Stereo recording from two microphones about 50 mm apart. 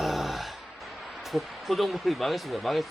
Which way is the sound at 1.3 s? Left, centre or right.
Centre.